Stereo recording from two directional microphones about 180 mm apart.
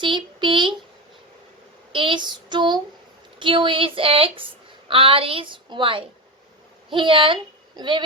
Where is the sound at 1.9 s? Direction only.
30° right (ahead or behind).